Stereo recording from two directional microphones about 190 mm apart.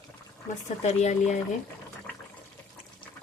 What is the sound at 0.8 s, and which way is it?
Speech, 40° left (ahead or behind).